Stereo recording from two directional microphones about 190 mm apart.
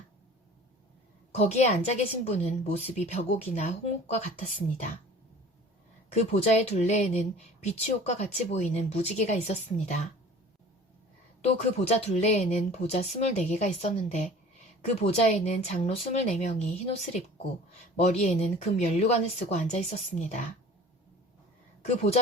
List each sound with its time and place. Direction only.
1.4 s speech: 35° left (ahead or behind)
6.1 s speech: 35° left (ahead or behind)
11.4 s speech: 35° left (ahead or behind)
21.8 s speech: 35° left (ahead or behind)